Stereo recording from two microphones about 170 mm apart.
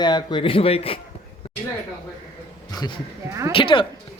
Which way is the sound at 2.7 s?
25° left (ahead or behind).